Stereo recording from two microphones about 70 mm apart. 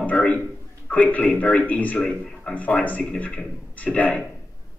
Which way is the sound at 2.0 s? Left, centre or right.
Centre.